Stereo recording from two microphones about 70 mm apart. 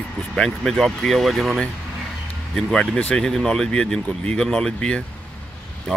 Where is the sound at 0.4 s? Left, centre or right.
Centre.